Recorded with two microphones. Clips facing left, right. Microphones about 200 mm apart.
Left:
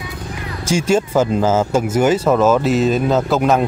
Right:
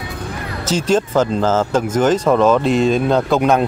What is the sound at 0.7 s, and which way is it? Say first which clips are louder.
Speech: even; 10° left (ahead or behind).